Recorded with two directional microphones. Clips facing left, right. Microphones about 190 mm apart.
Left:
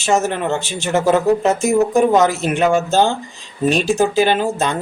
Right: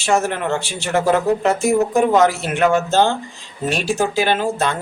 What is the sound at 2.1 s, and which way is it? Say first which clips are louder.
Speech: left 1 dB; 20° left (ahead or behind).